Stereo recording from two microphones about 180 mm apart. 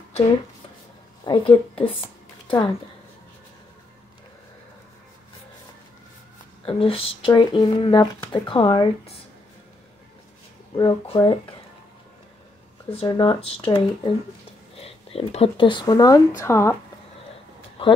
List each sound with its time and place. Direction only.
1.2 s speech: 30° left (ahead or behind)
6.6 s speech: 30° left (ahead or behind)
10.8 s speech: 25° left (ahead or behind)
12.9 s speech: 25° left (ahead or behind)
17.8 s a sound: 30° left (ahead or behind)